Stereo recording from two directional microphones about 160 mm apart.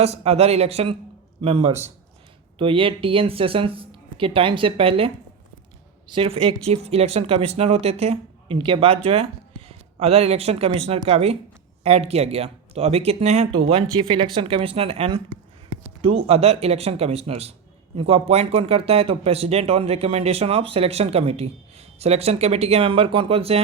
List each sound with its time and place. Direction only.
0.0 s speech: 40° right (ahead or behind)